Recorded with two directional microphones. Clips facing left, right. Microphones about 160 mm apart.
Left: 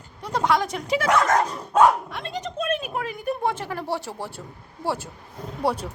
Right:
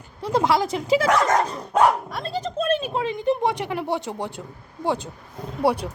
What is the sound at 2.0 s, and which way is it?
Speech, 35° right (ahead or behind).